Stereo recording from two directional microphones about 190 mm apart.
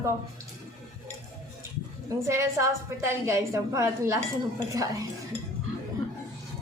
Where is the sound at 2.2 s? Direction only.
15° right (ahead or behind).